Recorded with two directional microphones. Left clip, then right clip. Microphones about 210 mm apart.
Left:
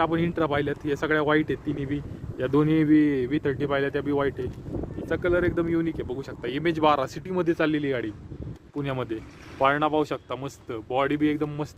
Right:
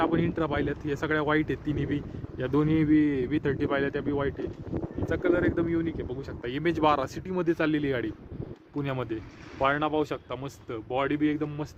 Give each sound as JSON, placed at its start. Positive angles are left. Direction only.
{"t": 0.0, "sound": "speech", "side_deg": 10}
{"t": 1.6, "sound": "speech", "side_deg": -10}
{"t": 2.4, "sound": "speech", "side_deg": 10}
{"t": 4.0, "sound": "speech", "side_deg": 15}
{"t": 5.0, "sound": "speech", "side_deg": 5}
{"t": 6.4, "sound": "speech", "side_deg": 5}